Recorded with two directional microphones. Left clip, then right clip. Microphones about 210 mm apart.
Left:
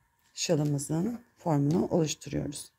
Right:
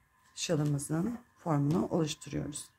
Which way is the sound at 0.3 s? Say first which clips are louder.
Left 4 dB; 25° left (ahead or behind).